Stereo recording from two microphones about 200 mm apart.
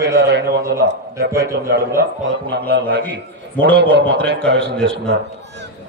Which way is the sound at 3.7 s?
60° right (ahead or behind).